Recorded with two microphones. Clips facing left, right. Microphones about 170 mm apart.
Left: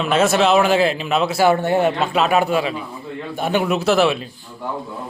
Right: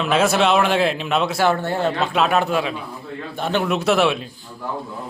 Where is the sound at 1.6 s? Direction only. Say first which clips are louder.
Left 4 dB; 15° left (ahead or behind); by 4.2 s centre (ahead or behind).